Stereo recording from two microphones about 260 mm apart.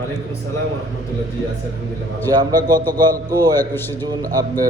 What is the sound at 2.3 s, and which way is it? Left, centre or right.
A man's voice, centre.